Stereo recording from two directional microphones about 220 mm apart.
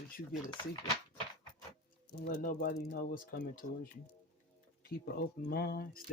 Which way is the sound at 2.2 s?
40° left (ahead or behind).